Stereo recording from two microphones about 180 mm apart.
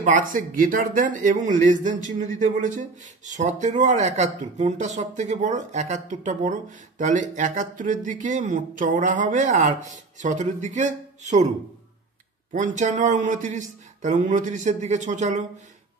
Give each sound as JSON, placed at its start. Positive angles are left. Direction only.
{"t": 0.0, "sound": "speech", "side_deg": -45}
{"t": 12.5, "sound": "speech", "side_deg": -45}